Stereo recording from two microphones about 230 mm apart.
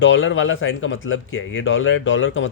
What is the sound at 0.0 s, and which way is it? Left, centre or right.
Speech, left.